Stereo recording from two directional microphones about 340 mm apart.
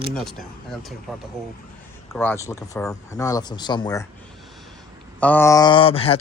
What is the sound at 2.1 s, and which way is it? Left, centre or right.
Speech, centre.